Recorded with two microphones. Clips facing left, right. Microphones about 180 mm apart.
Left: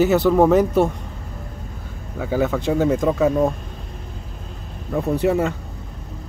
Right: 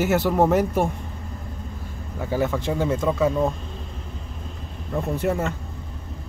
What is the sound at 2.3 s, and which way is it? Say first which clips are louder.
Speech: left 4 dB; 15° left (ahead or behind).